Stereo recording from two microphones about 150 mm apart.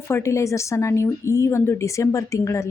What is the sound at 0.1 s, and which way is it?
A woman's voice, 20° left (ahead or behind).